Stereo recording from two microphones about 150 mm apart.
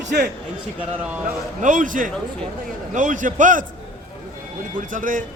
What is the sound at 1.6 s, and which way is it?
A man's voice, 55° right (ahead or behind).